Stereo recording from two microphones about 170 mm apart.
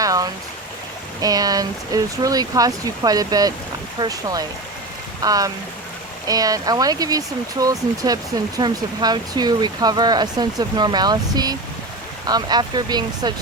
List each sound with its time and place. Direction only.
0.0 s stream: 20° right (ahead or behind)
1.2 s speech: 20° right (ahead or behind)